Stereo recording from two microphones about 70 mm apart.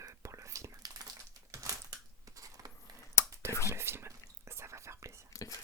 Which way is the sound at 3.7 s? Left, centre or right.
Right.